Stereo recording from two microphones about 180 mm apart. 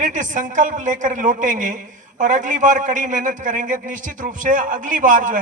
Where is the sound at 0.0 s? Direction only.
45° right (ahead or behind).